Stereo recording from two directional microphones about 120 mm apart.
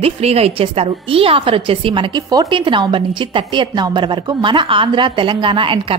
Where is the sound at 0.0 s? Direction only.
60° right (ahead or behind).